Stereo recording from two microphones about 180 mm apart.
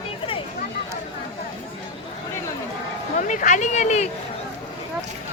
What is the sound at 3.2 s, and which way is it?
Speech, 45° left (ahead or behind).